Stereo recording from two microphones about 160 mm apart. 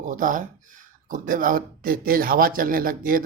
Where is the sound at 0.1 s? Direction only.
55° right (ahead or behind).